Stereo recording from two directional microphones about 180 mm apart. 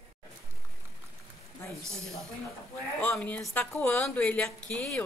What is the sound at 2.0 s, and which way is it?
A woman's voice, 5° left (ahead or behind).